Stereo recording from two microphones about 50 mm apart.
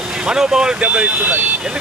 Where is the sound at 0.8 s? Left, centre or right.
Right.